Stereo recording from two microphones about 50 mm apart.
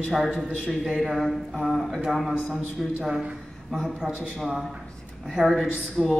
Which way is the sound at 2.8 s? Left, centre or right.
Centre.